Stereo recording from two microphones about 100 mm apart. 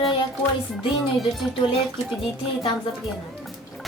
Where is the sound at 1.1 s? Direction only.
Centre (ahead or behind).